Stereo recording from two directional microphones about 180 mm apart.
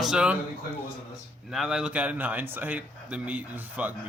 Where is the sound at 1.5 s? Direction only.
Centre (ahead or behind).